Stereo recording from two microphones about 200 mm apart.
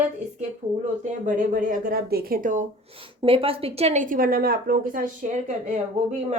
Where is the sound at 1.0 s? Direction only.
40° right (ahead or behind).